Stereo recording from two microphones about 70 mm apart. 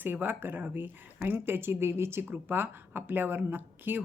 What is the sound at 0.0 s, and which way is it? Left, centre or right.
A woman's voice, right.